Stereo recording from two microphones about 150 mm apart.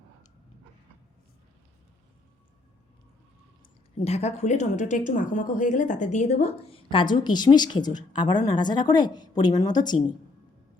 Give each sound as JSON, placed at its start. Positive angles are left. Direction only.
{"t": 3.6, "sound": "a woman's voice", "side_deg": 40}